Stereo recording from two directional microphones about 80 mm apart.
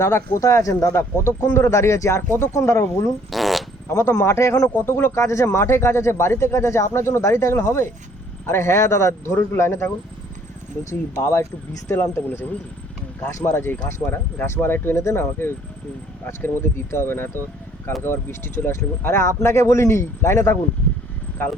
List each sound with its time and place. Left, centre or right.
0.0 s speech: left
3.3 s fart: centre
3.8 s speech: left
4.8 s speech: left
11.1 s speech: left